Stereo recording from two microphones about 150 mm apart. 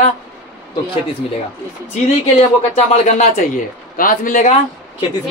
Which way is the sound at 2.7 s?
50° left (ahead or behind).